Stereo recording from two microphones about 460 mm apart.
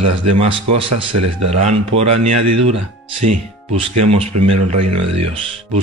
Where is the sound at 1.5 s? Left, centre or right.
Centre.